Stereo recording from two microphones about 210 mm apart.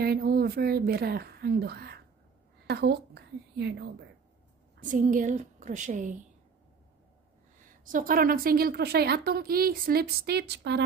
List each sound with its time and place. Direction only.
0.0 s a woman's voice: 45° right (ahead or behind)
4.7 s a woman's voice: 40° right (ahead or behind)
7.5 s a woman's voice: 40° right (ahead or behind)